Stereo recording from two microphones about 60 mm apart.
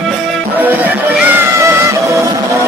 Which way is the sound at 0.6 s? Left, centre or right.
Right.